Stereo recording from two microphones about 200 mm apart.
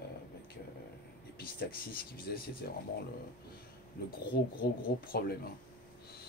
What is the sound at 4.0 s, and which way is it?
Speech, 50° left (ahead or behind).